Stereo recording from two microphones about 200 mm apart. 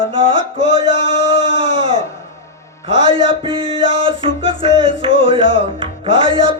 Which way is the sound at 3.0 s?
25° right (ahead or behind).